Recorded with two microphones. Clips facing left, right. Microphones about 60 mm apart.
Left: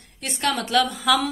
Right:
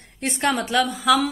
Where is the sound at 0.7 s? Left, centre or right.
Centre.